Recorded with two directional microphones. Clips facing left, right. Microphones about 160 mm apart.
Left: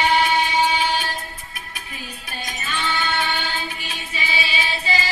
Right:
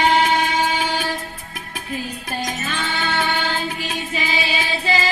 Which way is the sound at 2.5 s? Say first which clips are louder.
Right 2 dB; 50° right (ahead or behind).